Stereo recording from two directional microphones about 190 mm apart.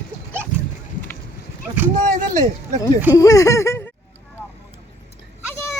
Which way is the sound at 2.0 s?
40° right (ahead or behind).